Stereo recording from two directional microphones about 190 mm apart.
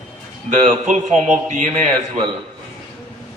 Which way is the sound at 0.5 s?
35° right (ahead or behind).